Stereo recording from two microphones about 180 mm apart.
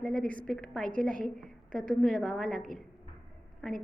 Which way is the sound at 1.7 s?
50° right (ahead or behind).